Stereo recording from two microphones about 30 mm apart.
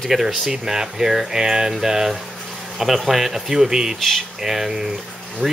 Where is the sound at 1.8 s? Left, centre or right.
Centre.